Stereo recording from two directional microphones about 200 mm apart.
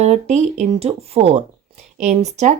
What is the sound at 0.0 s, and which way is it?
Speech, 35° right (ahead or behind).